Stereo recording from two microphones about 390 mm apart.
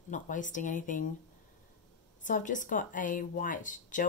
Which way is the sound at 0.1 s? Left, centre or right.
Centre.